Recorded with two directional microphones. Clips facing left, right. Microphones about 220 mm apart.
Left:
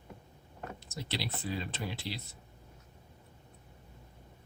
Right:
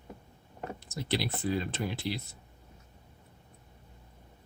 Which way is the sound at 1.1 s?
50° right (ahead or behind).